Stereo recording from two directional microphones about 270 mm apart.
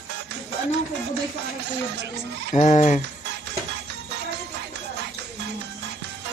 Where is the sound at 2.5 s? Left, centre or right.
Left.